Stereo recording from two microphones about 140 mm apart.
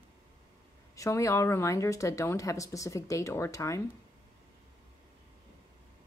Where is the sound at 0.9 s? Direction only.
20° left (ahead or behind).